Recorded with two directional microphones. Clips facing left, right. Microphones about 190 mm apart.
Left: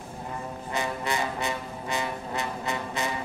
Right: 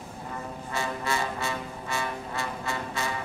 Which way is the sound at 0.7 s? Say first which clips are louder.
Left 1 dB; 20° left (ahead or behind).